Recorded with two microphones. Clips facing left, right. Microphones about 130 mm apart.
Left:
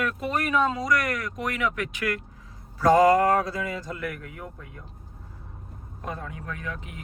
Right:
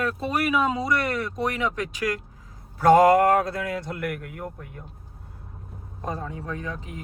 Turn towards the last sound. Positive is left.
turn(degrees=-35)  # may be behind; listen again after turning